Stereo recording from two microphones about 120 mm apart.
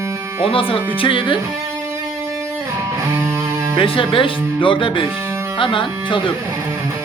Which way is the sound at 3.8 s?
45° left (ahead or behind).